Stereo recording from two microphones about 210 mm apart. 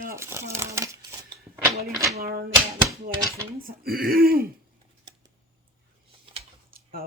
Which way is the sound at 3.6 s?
45° right (ahead or behind).